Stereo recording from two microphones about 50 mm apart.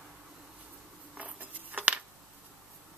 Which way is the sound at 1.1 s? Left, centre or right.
Right.